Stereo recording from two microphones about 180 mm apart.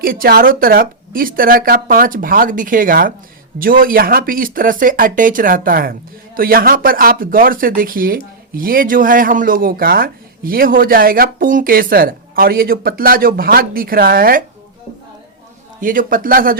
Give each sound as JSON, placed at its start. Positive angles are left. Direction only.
{"t": 0.0, "sound": "speech", "side_deg": -55}
{"t": 15.8, "sound": "speech", "side_deg": -50}